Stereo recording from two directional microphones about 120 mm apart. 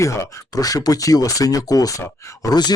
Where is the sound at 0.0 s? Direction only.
25° left (ahead or behind).